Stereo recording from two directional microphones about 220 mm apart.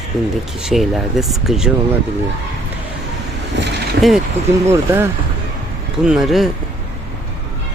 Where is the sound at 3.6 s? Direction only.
50° right (ahead or behind).